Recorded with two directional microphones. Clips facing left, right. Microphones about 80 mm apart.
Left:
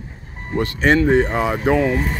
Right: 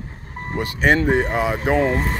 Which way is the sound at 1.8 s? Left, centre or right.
Right.